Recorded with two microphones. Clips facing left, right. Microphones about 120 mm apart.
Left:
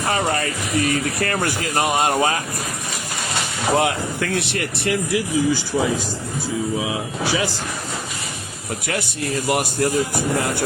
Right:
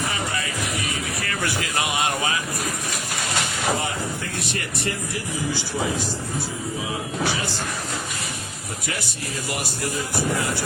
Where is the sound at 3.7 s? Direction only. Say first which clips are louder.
Left 7 dB; 80° left.